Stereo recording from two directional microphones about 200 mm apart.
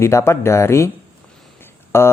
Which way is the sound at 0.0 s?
15° left (ahead or behind).